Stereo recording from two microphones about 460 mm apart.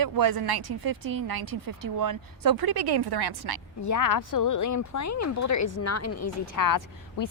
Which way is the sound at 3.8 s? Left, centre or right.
Left.